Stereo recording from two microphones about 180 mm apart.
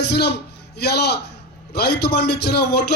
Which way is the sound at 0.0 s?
70° left (ahead or behind).